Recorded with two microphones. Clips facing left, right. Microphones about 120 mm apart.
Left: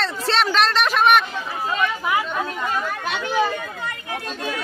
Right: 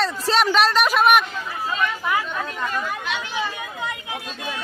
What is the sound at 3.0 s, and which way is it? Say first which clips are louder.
Chatter: left 5 dB; 50° left (ahead or behind).